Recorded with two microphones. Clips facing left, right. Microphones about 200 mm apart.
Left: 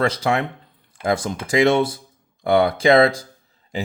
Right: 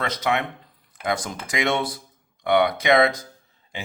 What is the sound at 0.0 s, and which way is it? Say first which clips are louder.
Speech: left 4 dB; 30° left (ahead or behind).